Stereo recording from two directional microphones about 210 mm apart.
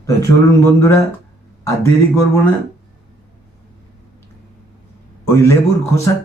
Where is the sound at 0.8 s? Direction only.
10° left (ahead or behind).